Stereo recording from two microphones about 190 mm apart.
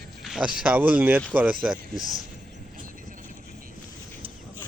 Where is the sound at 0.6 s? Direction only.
10° right (ahead or behind).